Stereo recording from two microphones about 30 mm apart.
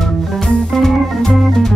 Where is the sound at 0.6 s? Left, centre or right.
Centre.